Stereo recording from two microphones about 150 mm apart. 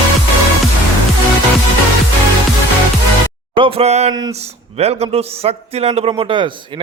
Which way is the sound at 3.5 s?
35° right (ahead or behind).